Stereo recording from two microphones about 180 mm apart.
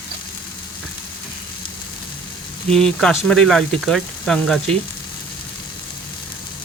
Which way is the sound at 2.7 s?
5° left (ahead or behind).